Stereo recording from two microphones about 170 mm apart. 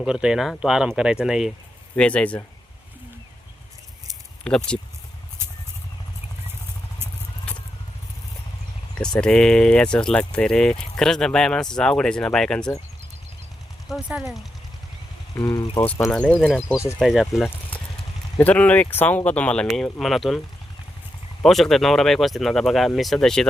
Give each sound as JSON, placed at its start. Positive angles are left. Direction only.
{"t": 0.0, "sound": "speech", "side_deg": -5}
{"t": 4.4, "sound": "speech", "side_deg": 5}
{"t": 5.4, "sound": "vehicle", "side_deg": -15}
{"t": 9.2, "sound": "speech", "side_deg": 5}
{"t": 13.8, "sound": "speech", "side_deg": 0}
{"t": 15.4, "sound": "speech", "side_deg": 25}
{"t": 15.8, "sound": "speech", "side_deg": 10}
{"t": 21.4, "sound": "speech", "side_deg": 0}